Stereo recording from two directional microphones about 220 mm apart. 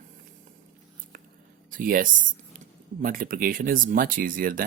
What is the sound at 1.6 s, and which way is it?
A man's voice, 40° right (ahead or behind).